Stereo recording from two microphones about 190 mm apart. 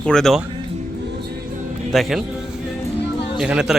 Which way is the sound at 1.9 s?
Centre (ahead or behind).